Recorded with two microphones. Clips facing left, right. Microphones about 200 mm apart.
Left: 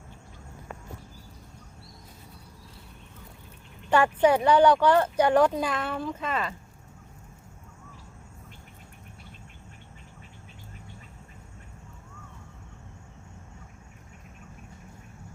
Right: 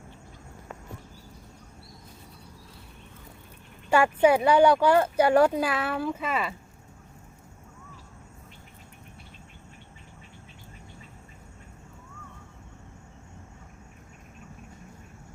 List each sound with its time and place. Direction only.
3.8 s speech: 10° right (ahead or behind)